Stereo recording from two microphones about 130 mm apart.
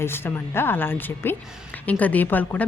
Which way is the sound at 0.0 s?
20° left (ahead or behind).